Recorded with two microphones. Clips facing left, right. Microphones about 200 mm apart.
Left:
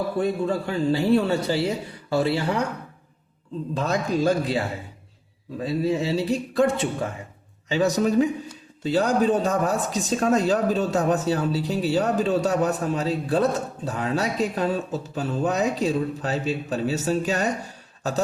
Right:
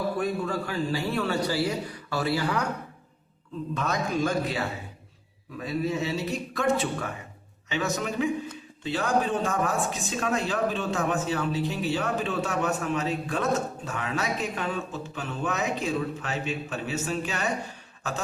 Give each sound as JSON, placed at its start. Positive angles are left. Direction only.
{"t": 0.2, "sound": "speech", "side_deg": 25}
{"t": 3.8, "sound": "speech", "side_deg": 35}